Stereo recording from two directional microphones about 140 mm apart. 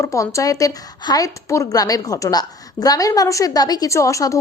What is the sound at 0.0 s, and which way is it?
A woman's voice, 20° left (ahead or behind).